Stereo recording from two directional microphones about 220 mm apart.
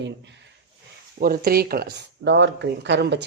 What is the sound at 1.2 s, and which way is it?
Speech, 45° right (ahead or behind).